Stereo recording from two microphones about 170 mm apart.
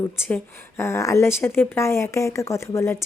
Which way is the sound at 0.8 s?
15° left (ahead or behind).